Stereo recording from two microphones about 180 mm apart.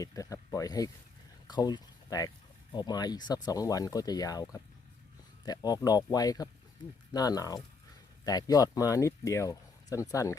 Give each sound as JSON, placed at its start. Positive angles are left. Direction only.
{"t": 0.0, "sound": "speech", "side_deg": 20}